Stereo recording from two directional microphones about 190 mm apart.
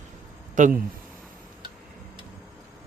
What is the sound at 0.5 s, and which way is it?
Speech, 40° right (ahead or behind).